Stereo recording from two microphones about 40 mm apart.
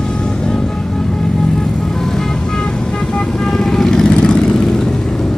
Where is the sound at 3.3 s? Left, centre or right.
Centre.